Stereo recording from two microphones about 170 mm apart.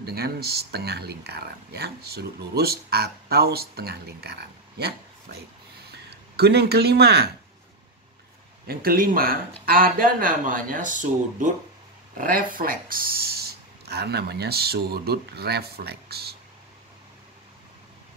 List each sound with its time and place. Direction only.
0.0 s speech: 70° right (ahead or behind)
5.9 s a sound: 70° right (ahead or behind)
8.6 s speech: 60° right (ahead or behind)